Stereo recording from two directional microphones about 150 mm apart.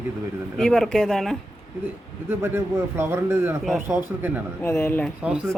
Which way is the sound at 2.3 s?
15° right (ahead or behind).